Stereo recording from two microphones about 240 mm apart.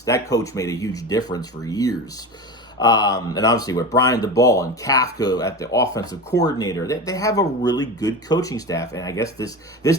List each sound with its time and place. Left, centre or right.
0.0 s speech: centre